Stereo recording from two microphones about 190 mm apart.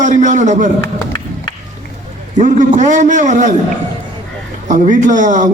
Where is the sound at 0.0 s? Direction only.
40° right (ahead or behind).